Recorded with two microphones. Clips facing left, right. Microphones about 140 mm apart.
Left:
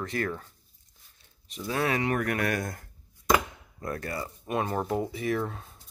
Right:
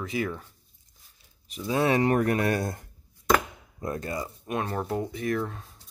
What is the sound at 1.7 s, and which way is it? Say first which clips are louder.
Speech: right 5 dB; 25° right (ahead or behind).